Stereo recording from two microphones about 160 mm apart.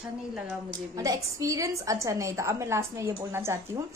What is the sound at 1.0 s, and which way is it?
A woman's voice, 20° right (ahead or behind).